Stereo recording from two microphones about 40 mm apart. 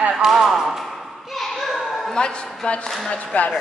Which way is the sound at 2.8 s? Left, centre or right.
Centre.